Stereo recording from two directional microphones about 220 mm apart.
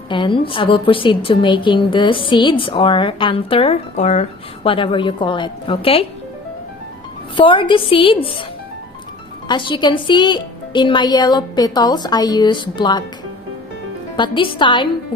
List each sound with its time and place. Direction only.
0.1 s a woman's voice: 20° left (ahead or behind)
7.3 s a woman's voice: 25° left (ahead or behind)
9.5 s a woman's voice: 20° left (ahead or behind)
14.2 s a woman's voice: 20° left (ahead or behind)